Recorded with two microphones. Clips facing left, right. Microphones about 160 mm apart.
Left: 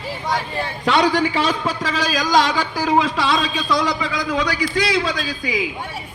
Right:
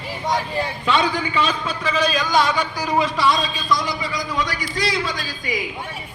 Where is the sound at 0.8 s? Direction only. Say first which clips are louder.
Left 5 dB; 75° left (ahead or behind).